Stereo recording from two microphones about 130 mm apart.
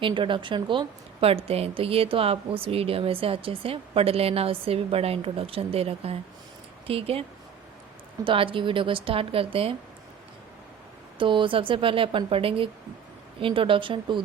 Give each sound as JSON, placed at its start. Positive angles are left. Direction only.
{"t": 0.0, "sound": "a woman's voice", "side_deg": -40}
{"t": 11.2, "sound": "a woman's voice", "side_deg": -40}